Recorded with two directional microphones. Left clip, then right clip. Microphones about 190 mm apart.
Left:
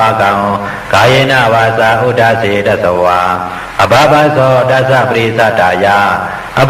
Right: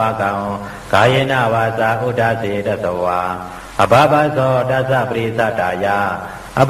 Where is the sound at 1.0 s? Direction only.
35° right (ahead or behind).